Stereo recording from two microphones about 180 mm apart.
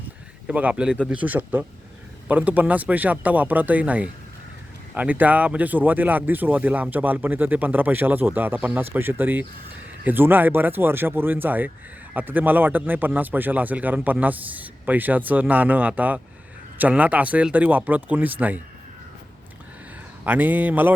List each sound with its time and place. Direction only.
0.4 s speech: 5° right (ahead or behind)
20.2 s speech: 10° right (ahead or behind)